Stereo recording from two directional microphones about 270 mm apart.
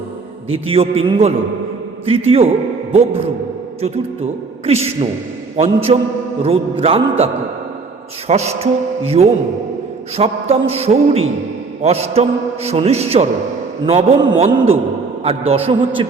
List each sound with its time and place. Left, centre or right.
0.5 s a man's voice: right
3.8 s a man's voice: right
8.3 s a man's voice: right